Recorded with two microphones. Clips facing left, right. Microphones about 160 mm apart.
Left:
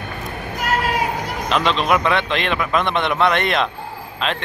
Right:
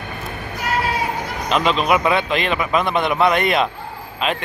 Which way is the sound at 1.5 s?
5° right (ahead or behind).